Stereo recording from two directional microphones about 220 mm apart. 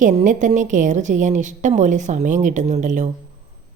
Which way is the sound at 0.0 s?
35° right (ahead or behind).